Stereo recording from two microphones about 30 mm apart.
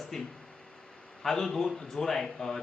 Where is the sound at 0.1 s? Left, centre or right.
Centre.